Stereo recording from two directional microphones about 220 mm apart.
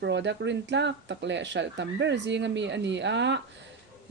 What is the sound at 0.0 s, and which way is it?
A woman's voice, 55° right (ahead or behind).